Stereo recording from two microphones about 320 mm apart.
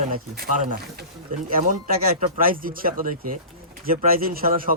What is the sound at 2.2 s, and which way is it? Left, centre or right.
Speech, right.